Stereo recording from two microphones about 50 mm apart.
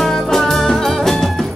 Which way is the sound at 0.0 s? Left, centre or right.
Centre.